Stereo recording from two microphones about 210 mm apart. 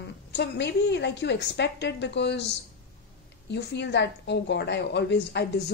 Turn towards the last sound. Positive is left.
turn(degrees=55)  # may be behind; listen again after turning